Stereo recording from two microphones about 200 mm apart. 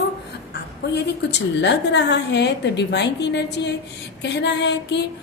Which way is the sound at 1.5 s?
60° left (ahead or behind).